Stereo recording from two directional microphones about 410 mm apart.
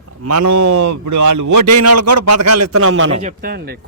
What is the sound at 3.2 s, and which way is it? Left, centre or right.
Speech, right.